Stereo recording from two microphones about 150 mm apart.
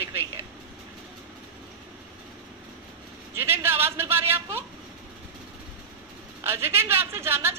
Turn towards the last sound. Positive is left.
turn(degrees=-15)  # may be behind; listen again after turning